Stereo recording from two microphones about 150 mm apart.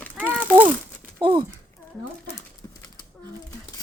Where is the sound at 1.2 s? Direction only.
35° right (ahead or behind).